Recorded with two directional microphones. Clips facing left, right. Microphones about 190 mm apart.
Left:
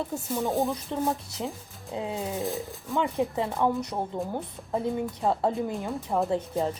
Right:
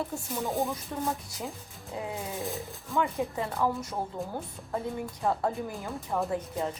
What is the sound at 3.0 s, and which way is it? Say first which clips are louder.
A woman's voice: left 3 dB; 20° left (ahead or behind).